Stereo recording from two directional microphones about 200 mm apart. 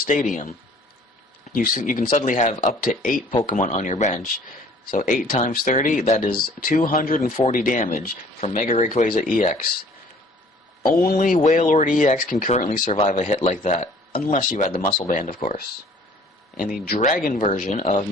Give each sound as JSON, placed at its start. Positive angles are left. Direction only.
{"t": 1.5, "sound": "speech", "side_deg": 45}
{"t": 10.8, "sound": "speech", "side_deg": 45}
{"t": 12.8, "sound": "a man's voice", "side_deg": 25}
{"t": 13.1, "sound": "speech", "side_deg": 40}